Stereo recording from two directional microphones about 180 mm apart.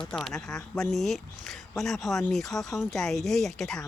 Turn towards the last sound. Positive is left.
turn(degrees=0)  # may be behind; listen again after turning